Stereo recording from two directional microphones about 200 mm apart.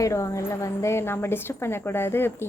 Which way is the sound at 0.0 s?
15° left (ahead or behind).